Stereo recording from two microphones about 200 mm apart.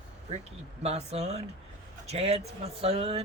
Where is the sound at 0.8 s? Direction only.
30° right (ahead or behind).